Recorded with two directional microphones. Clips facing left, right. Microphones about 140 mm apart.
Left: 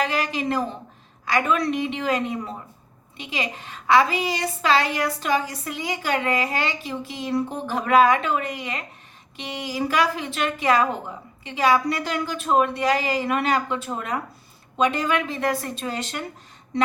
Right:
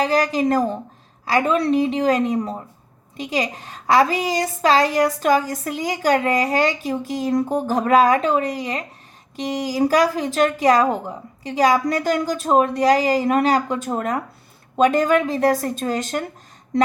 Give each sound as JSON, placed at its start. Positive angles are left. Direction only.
{"t": 0.0, "sound": "a woman's voice", "side_deg": -35}